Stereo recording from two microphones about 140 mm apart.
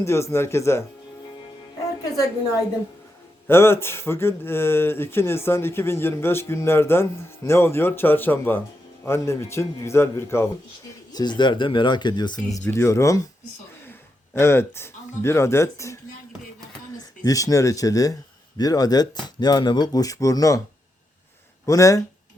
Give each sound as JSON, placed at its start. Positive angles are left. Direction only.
{"t": 0.0, "sound": "speech", "side_deg": 20}
{"t": 3.4, "sound": "speech", "side_deg": 15}
{"t": 11.1, "sound": "speech", "side_deg": 30}
{"t": 12.5, "sound": "speech", "side_deg": 15}
{"t": 14.3, "sound": "speech", "side_deg": 15}
{"t": 17.2, "sound": "speech", "side_deg": 25}
{"t": 21.7, "sound": "speech", "side_deg": 25}